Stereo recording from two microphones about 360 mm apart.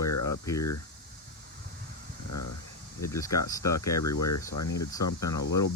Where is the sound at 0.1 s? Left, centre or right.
Left.